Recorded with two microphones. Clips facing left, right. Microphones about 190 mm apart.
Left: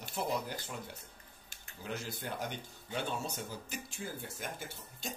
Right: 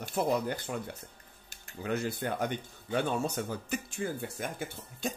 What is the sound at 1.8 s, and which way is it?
Speech, 60° right (ahead or behind).